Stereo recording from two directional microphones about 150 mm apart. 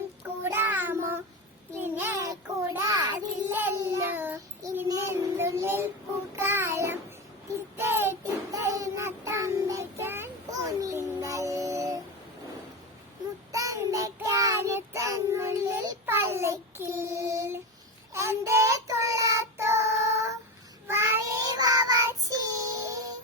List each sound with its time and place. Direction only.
0.4 s child singing: 15° right (ahead or behind)
1.7 s a sound: 15° right (ahead or behind)
3.4 s child singing: 15° right (ahead or behind)
13.5 s child singing: 20° right (ahead or behind)